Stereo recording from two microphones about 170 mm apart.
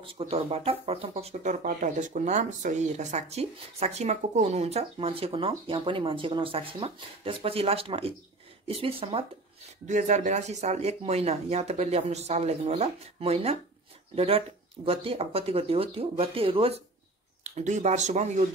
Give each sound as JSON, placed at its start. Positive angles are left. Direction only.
{"t": 0.0, "sound": "speech", "side_deg": -35}
{"t": 9.8, "sound": "speech", "side_deg": -45}